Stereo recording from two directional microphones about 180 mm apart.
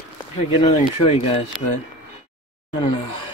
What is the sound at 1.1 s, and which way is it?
Speech, 35° left (ahead or behind).